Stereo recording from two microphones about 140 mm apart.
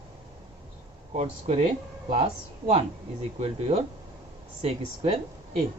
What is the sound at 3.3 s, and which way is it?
A man's voice, 45° right (ahead or behind).